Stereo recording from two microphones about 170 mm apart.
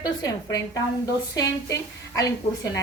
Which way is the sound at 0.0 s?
20° left (ahead or behind).